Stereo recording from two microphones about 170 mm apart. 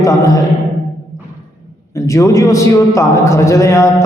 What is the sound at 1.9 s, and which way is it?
A man's voice, 20° left (ahead or behind).